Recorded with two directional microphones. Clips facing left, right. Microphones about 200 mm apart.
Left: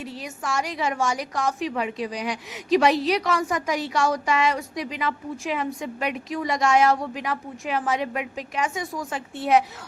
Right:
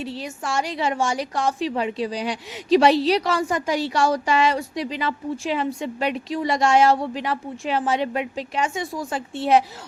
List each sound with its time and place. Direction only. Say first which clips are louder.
0.0 s a woman's voice: right 3 dB; 30° right (ahead or behind)